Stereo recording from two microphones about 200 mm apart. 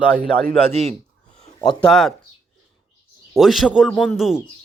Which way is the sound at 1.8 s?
5° left (ahead or behind).